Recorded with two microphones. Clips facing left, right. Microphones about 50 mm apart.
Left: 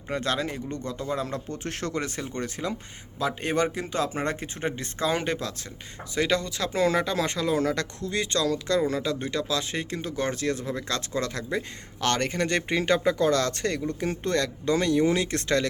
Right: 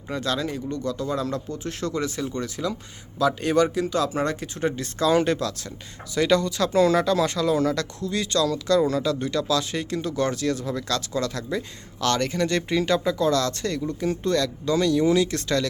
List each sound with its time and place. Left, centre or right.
0.1 s speech: left
1.5 s speech: left